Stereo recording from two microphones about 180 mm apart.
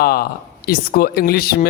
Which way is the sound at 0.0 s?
55° left (ahead or behind).